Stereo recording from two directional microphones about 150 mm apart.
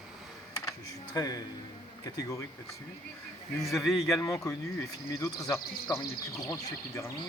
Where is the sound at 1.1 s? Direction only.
25° left (ahead or behind).